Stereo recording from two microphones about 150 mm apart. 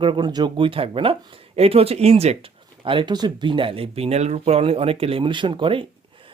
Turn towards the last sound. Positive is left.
turn(degrees=-35)  # may be behind; listen again after turning